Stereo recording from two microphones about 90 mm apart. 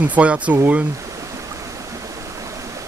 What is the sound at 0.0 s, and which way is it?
Speech, 15° right (ahead or behind).